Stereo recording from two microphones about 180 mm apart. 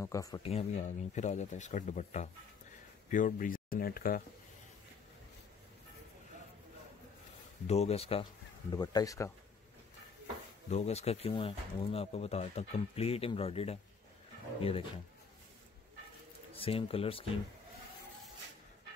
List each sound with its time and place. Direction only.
0.0 s speech: 20° left (ahead or behind)
0.4 s speech: 35° left (ahead or behind); by 4.2 s 50° left (ahead or behind)
7.6 s speech: 35° left (ahead or behind)
8.7 s speech: 20° left (ahead or behind)
10.7 s speech: 35° left (ahead or behind)
16.5 s speech: 30° left (ahead or behind)